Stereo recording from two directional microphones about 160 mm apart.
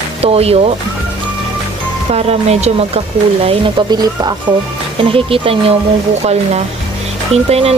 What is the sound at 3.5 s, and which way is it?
Speech, 30° right (ahead or behind).